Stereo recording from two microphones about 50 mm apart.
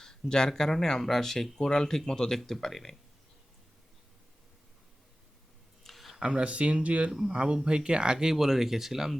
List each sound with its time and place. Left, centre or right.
0.0 s speech: centre
5.8 s a sound: centre
6.2 s speech: right
7.1 s speech: centre